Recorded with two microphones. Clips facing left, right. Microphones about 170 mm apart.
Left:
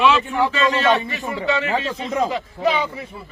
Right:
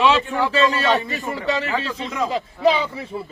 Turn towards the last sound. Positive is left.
turn(degrees=-30)  # may be behind; listen again after turning